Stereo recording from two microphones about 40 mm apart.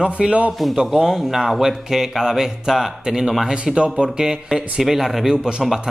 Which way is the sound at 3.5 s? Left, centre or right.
Right.